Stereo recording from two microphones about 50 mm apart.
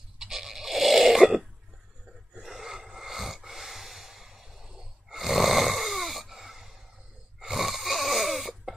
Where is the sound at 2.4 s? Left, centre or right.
Centre.